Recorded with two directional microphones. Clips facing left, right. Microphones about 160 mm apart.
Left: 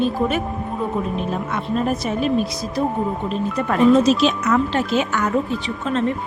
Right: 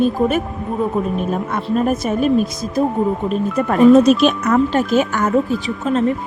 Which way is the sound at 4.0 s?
55° right (ahead or behind).